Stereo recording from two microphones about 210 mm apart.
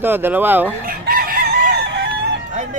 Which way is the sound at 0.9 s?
45° right (ahead or behind).